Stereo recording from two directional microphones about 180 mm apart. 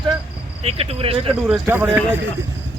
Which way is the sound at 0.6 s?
30° right (ahead or behind).